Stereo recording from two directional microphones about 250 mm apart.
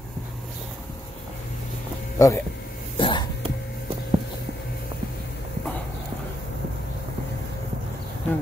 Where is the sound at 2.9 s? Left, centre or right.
Centre.